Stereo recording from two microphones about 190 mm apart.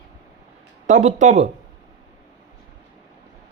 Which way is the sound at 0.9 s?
40° right (ahead or behind).